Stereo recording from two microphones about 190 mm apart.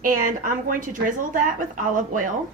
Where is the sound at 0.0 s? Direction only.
45° right (ahead or behind).